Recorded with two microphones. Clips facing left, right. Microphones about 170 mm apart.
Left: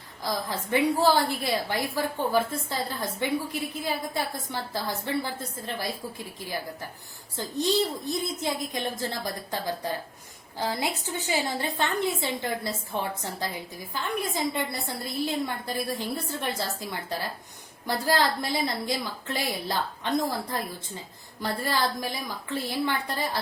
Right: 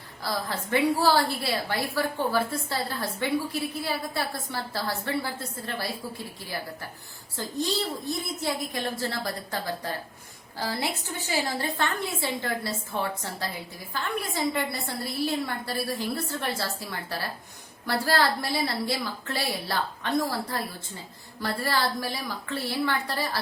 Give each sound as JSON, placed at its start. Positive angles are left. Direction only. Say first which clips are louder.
{"t": 0.2, "sound": "a woman's voice", "louder": "even", "side_deg": 15}